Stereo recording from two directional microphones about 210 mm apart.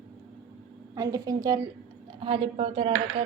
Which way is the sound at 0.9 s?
15° right (ahead or behind).